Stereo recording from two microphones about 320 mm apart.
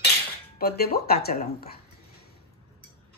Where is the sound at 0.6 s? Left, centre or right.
Left.